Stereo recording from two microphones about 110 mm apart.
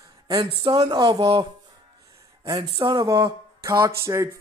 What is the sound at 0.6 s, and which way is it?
Speech, 40° right (ahead or behind).